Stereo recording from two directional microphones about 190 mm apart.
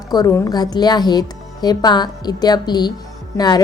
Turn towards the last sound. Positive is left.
turn(degrees=20)  # may be behind; listen again after turning